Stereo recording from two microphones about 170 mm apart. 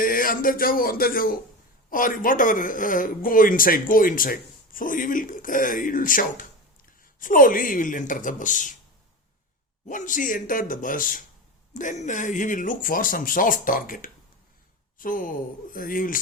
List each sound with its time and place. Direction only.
0.0 s speech: 55° left (ahead or behind)
9.9 s speech: 50° left (ahead or behind)